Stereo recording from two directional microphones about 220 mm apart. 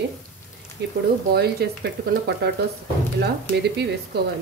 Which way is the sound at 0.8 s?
50° right (ahead or behind).